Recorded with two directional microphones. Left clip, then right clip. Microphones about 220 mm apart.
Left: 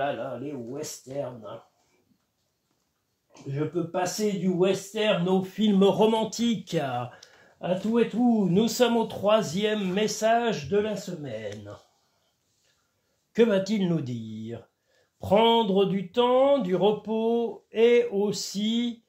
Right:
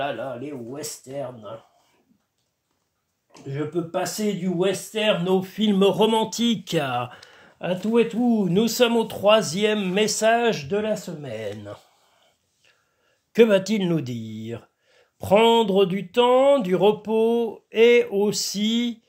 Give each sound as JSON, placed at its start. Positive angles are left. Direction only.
{"t": 3.3, "sound": "speech", "side_deg": -50}
{"t": 13.3, "sound": "speech", "side_deg": -45}